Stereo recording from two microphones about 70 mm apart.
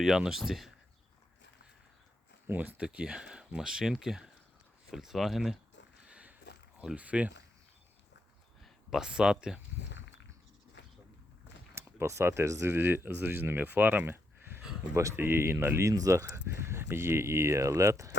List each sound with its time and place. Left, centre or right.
0.0 s speech: centre
2.5 s speech: right
2.8 s speech: centre
6.1 s a sound: centre
6.8 s speech: centre
8.6 s speech: centre
11.7 s speech: right
12.7 s speech: right
14.9 s speech: right